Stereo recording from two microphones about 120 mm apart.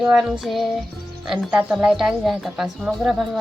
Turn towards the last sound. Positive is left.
turn(degrees=-5)  # may be behind; listen again after turning